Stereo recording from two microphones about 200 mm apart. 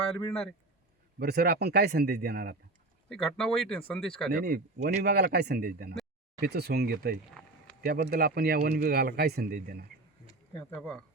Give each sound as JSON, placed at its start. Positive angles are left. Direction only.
{"t": 1.2, "sound": "speech", "side_deg": -50}
{"t": 3.1, "sound": "speech", "side_deg": 0}
{"t": 4.3, "sound": "speech", "side_deg": -50}